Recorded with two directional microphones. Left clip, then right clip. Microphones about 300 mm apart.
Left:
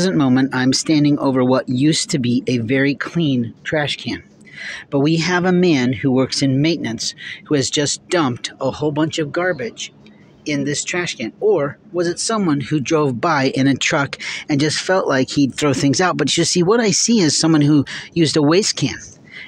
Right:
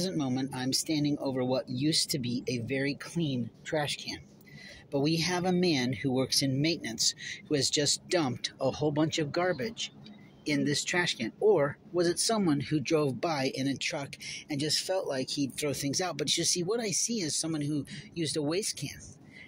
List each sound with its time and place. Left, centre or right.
0.0 s speech: right